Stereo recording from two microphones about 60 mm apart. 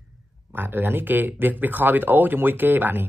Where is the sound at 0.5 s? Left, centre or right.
Right.